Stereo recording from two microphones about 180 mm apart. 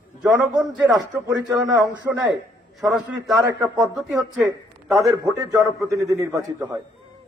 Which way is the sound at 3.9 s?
Centre (ahead or behind).